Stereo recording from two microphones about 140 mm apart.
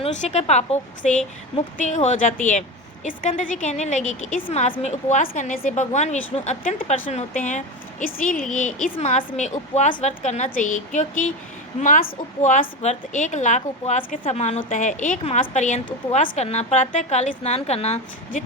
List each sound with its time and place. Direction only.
0.0 s a woman's voice: 55° left (ahead or behind); by 8.4 s 85° left
8.5 s a woman's voice: 65° left (ahead or behind)
14.7 s a woman's voice: 65° left (ahead or behind)